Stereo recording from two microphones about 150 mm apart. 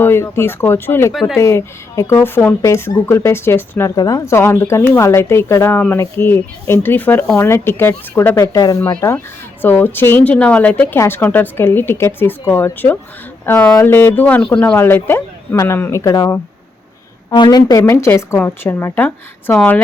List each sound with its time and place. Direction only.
0.0 s speech: 15° left (ahead or behind)
1.1 s speech: centre (ahead or behind)
1.4 s speech: 20° left (ahead or behind)
8.5 s speech: 25° left (ahead or behind)